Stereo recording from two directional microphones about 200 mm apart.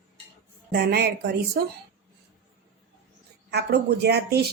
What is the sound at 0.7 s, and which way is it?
Speech, 55° right (ahead or behind).